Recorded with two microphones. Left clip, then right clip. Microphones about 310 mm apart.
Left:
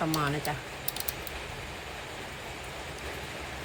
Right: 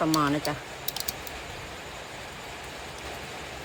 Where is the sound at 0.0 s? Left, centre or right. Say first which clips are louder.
Right 5 dB; centre.